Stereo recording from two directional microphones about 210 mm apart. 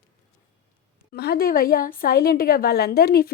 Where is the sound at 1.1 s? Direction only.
50° left (ahead or behind).